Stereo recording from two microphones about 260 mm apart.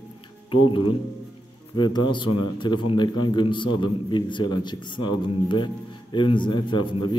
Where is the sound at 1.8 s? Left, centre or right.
Centre.